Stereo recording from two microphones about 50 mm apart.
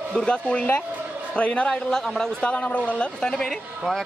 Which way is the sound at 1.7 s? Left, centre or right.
Centre.